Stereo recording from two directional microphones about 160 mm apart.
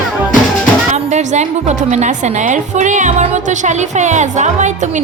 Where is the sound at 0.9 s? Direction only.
45° right (ahead or behind).